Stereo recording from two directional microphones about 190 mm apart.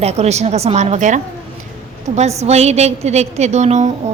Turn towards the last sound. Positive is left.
turn(degrees=-35)  # may be behind; listen again after turning